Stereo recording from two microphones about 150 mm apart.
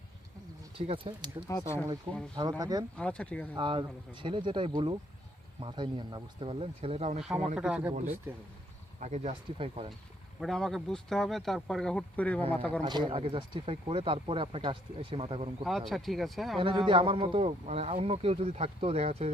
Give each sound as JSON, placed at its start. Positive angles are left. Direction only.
{"t": 0.8, "sound": "speech", "side_deg": -35}
{"t": 1.5, "sound": "speech", "side_deg": 20}
{"t": 2.3, "sound": "speech", "side_deg": -25}
{"t": 3.0, "sound": "speech", "side_deg": 10}
{"t": 3.5, "sound": "speech", "side_deg": -35}
{"t": 7.2, "sound": "speech", "side_deg": -5}
{"t": 9.0, "sound": "speech", "side_deg": -50}
{"t": 10.4, "sound": "speech", "side_deg": 0}
{"t": 12.8, "sound": "speech", "side_deg": -30}
{"t": 15.6, "sound": "speech", "side_deg": 0}
{"t": 16.6, "sound": "speech", "side_deg": -35}